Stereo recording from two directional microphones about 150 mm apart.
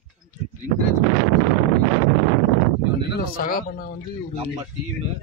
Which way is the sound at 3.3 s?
70° left (ahead or behind).